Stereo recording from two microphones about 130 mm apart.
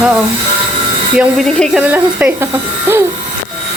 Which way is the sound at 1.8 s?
10° right (ahead or behind).